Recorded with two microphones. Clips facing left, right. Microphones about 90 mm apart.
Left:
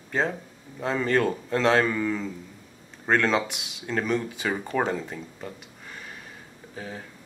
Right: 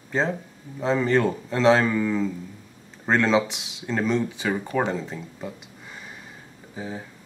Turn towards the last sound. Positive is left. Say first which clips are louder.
# right 3 dB
turn(degrees=-10)  # may be behind; listen again after turning